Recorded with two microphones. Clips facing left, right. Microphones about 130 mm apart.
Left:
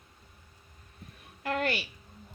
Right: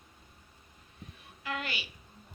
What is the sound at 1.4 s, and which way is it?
Speech, 45° left (ahead or behind).